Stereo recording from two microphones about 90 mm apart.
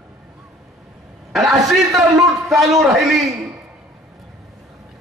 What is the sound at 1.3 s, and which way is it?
A man's voice, 5° right (ahead or behind).